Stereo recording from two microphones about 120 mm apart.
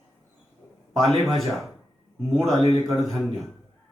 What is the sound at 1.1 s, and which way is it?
Speech, centre (ahead or behind).